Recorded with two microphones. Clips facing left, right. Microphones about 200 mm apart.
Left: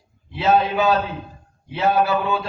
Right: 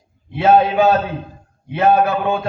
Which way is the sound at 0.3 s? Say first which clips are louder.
Right 5 dB; 55° right (ahead or behind).